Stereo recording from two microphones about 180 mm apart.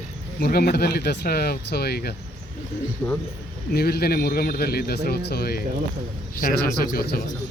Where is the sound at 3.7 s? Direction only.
60° left (ahead or behind).